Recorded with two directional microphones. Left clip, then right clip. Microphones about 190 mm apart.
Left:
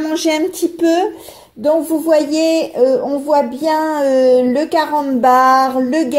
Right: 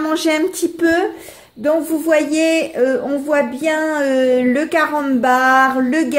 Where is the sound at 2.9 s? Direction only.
30° right (ahead or behind).